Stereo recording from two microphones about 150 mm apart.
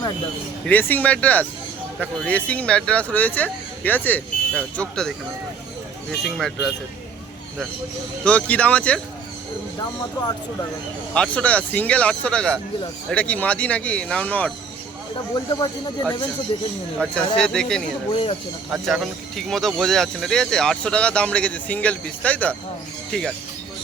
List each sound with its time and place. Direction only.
0.6 s speech: 10° left (ahead or behind)
8.2 s speech: 10° left (ahead or behind)
11.1 s speech: 5° left (ahead or behind)
15.5 s speech: 25° left (ahead or behind)
17.3 s speech: 5° left (ahead or behind)
18.1 s speech: 35° left (ahead or behind)
18.7 s speech: centre (ahead or behind)